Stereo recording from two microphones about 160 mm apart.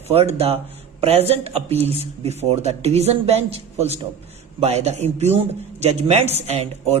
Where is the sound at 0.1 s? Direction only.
40° right (ahead or behind).